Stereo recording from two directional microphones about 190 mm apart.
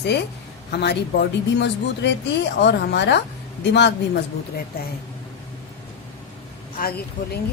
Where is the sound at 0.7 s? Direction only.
60° left (ahead or behind).